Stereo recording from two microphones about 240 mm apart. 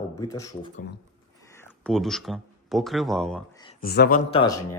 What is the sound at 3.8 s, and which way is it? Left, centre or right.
Speech, left.